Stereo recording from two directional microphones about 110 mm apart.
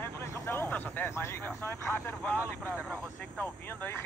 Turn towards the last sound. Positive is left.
turn(degrees=15)  # may be behind; listen again after turning